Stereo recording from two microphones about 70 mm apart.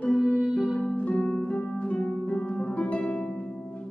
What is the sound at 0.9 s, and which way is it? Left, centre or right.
Music, centre.